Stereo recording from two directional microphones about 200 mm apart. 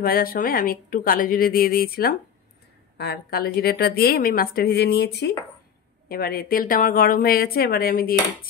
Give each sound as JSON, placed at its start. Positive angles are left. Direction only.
{"t": 0.0, "sound": "a woman's voice", "side_deg": 45}